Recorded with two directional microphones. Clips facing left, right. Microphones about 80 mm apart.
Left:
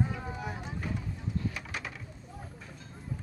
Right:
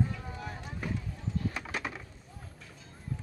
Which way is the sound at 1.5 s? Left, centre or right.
Right.